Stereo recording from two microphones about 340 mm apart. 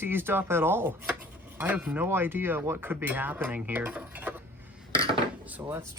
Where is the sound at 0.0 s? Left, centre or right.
Centre.